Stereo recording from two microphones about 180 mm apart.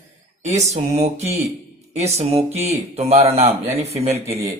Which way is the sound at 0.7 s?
35° right (ahead or behind).